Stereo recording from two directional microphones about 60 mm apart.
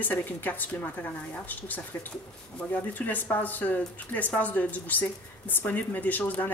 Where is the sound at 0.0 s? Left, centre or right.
Left.